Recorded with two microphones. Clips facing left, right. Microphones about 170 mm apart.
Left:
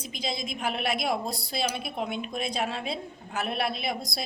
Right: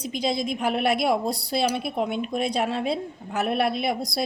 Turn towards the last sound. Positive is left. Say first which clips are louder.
# right 6 dB
turn(degrees=-65)  # may be behind; listen again after turning